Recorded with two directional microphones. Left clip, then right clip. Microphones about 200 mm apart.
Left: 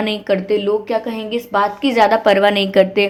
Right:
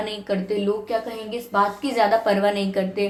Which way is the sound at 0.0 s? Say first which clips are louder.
Left 8 dB; 40° left (ahead or behind).